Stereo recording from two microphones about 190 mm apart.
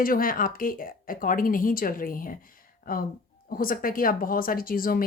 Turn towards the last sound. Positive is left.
turn(degrees=50)  # may be behind; listen again after turning